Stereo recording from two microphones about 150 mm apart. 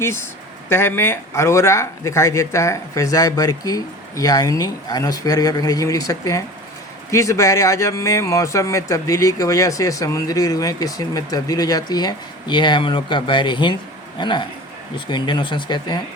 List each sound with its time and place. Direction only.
0.7 s speech: 15° left (ahead or behind); by 16.0 s 30° left (ahead or behind)